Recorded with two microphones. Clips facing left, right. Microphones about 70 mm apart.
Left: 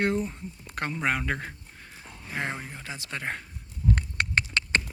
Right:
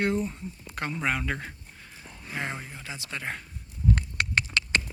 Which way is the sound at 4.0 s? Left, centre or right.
Left.